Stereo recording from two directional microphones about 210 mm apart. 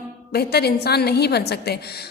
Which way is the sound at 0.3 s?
50° left (ahead or behind).